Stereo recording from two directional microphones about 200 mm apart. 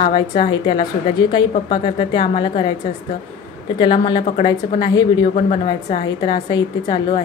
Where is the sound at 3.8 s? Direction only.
25° left (ahead or behind).